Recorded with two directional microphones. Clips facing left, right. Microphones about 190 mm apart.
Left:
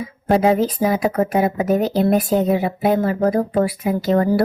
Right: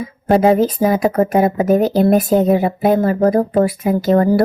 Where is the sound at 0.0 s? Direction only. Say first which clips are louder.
Right 3 dB; 45° right (ahead or behind).